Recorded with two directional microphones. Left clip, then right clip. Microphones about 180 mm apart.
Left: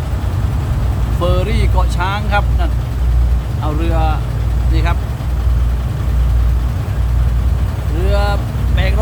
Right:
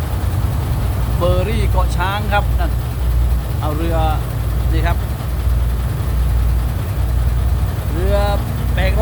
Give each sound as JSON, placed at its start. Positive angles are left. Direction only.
{"t": 1.2, "sound": "speech", "side_deg": 5}
{"t": 3.8, "sound": "speech", "side_deg": 5}
{"t": 8.1, "sound": "speech", "side_deg": 5}